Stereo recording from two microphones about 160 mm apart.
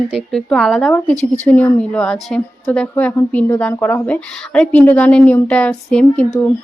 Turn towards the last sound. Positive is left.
turn(degrees=5)  # may be behind; listen again after turning